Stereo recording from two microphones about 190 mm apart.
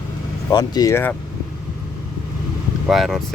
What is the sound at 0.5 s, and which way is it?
Speech, 20° left (ahead or behind).